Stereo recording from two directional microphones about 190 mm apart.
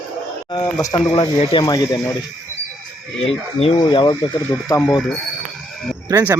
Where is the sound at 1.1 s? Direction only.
25° left (ahead or behind).